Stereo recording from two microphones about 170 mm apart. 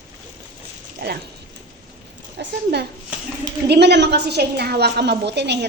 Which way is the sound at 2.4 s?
75° right (ahead or behind).